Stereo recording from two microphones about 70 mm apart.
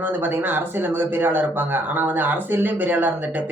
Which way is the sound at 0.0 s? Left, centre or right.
Right.